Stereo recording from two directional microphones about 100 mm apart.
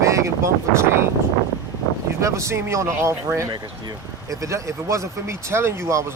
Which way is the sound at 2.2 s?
30° right (ahead or behind).